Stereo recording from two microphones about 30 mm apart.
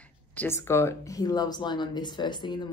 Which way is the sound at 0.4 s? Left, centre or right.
Left.